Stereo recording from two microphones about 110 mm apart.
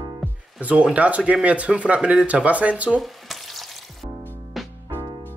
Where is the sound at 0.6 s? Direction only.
10° right (ahead or behind).